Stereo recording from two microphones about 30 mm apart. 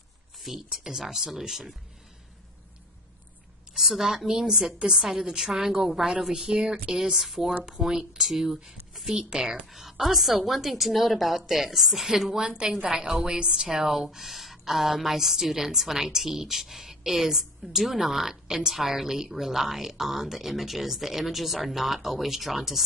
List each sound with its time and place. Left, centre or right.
0.4 s a woman's voice: centre
3.7 s a woman's voice: centre
6.3 s a woman's voice: right
7.1 s a woman's voice: centre
8.2 s a woman's voice: centre
9.3 s a woman's voice: right
9.7 s a woman's voice: centre
12.4 s a woman's voice: right
13.7 s a woman's voice: centre